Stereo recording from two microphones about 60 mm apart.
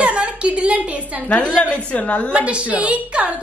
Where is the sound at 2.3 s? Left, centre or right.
Right.